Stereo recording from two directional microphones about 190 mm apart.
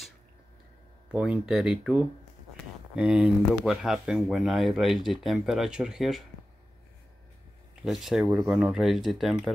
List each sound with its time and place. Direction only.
1.0 s speech: 5° right (ahead or behind)
7.8 s speech: centre (ahead or behind)